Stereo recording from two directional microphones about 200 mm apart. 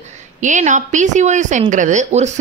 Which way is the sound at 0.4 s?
40° right (ahead or behind).